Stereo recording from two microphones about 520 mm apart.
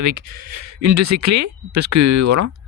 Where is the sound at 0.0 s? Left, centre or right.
Right.